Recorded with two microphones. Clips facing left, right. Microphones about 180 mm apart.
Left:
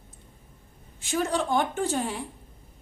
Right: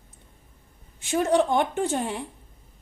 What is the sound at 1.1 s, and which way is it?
A woman's voice, 20° right (ahead or behind).